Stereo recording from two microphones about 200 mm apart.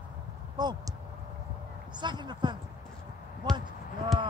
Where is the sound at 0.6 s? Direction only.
20° right (ahead or behind).